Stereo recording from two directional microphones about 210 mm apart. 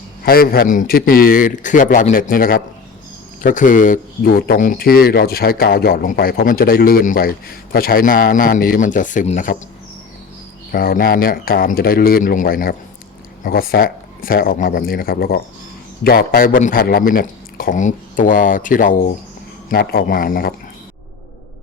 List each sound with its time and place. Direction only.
0.3 s speech: 45° left (ahead or behind)
10.7 s speech: 45° left (ahead or behind)